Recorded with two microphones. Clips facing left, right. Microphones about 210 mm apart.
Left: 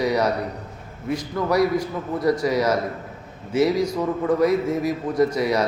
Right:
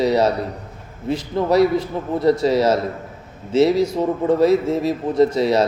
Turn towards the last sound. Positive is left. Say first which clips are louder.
# right 4 dB
turn(degrees=-25)  # may be behind; listen again after turning